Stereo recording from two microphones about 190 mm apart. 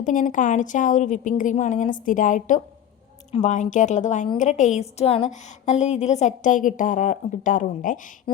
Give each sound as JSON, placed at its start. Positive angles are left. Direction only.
{"t": 0.0, "sound": "a woman's voice", "side_deg": 45}